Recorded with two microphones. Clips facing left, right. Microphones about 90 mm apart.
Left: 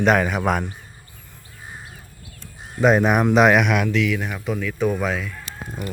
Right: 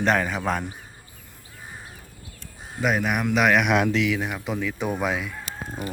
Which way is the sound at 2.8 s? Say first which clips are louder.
Left 7 dB; 35° left (ahead or behind).